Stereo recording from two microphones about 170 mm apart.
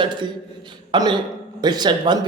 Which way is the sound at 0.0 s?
25° right (ahead or behind).